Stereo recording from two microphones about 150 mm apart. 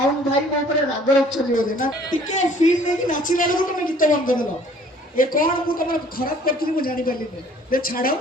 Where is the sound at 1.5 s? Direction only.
65° left (ahead or behind).